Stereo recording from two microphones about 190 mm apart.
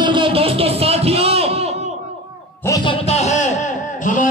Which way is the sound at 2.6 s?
20° left (ahead or behind).